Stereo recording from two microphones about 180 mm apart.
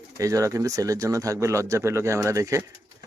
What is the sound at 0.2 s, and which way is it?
Speech, 20° right (ahead or behind).